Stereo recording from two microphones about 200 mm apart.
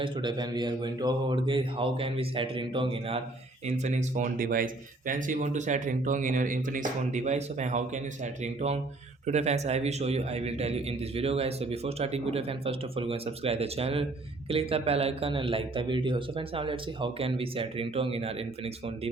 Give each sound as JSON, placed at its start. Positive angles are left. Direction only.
{"t": 0.0, "sound": "a man's voice", "side_deg": -20}